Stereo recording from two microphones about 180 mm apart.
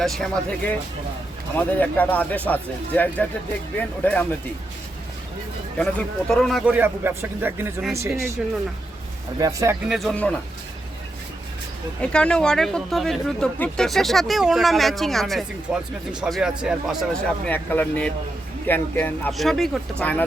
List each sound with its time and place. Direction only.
0.0 s speech: centre (ahead or behind)
5.7 s speech: 5° left (ahead or behind); by 8.4 s 15° right (ahead or behind)
9.4 s speech: 20° right (ahead or behind)
9.9 s speech: centre (ahead or behind)
12.1 s speech: 5° left (ahead or behind)
17.5 s speech: 10° left (ahead or behind)
19.3 s speech: centre (ahead or behind)